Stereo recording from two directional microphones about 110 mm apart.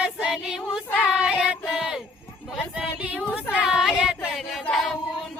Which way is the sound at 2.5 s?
5° right (ahead or behind).